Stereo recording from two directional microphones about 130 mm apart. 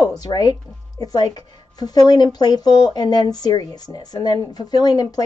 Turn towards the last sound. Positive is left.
turn(degrees=30)  # may be behind; listen again after turning